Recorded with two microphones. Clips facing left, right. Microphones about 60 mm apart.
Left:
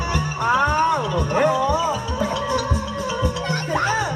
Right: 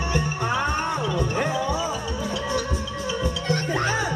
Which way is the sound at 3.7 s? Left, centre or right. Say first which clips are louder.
Left 6 dB; left.